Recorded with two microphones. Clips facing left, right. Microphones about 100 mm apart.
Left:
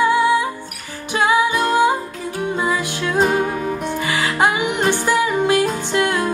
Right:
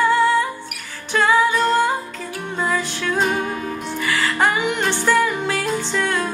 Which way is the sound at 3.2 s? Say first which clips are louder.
Left 5 dB; 35° left (ahead or behind).